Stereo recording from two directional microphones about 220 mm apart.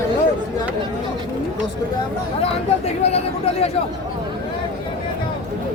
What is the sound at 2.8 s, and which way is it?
Speech, 30° left (ahead or behind).